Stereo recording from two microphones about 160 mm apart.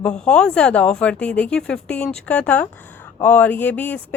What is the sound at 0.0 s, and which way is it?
A woman's voice, 5° left (ahead or behind).